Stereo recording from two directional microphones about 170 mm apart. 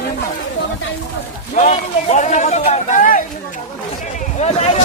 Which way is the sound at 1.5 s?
45° left (ahead or behind).